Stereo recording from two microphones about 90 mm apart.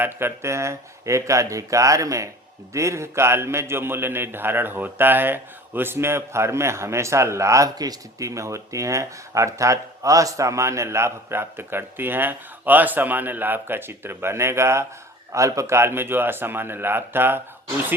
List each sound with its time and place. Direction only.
0.0 s a man's voice: 25° right (ahead or behind)